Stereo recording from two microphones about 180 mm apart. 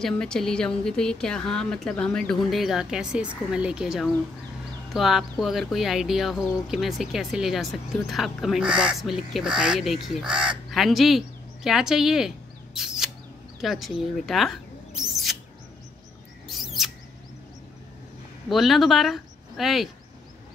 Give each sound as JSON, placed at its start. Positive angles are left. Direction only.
{"t": 0.0, "sound": "speech", "side_deg": 5}
{"t": 12.7, "sound": "rodents", "side_deg": 0}
{"t": 13.6, "sound": "speech", "side_deg": 0}
{"t": 16.4, "sound": "mouse", "side_deg": 0}
{"t": 18.5, "sound": "speech", "side_deg": 0}